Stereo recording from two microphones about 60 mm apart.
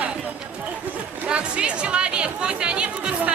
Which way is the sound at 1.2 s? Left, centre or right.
Centre.